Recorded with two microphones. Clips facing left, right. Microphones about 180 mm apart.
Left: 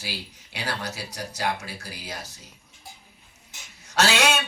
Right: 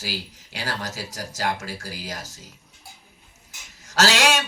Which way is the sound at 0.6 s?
40° right (ahead or behind).